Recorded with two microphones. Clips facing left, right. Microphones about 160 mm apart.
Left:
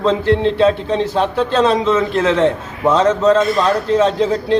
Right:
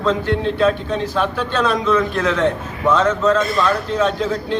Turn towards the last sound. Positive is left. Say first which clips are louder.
# left 4 dB
turn(degrees=30)  # may be behind; listen again after turning